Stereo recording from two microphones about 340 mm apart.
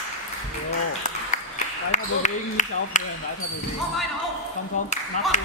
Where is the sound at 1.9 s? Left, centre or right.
Left.